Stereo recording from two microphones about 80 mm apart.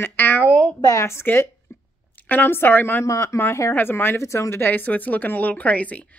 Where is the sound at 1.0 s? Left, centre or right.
Left.